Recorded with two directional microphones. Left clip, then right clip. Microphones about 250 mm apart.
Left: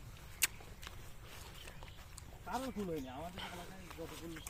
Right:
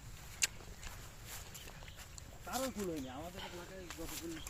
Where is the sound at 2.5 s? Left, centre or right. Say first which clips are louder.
Right 1 dB; right.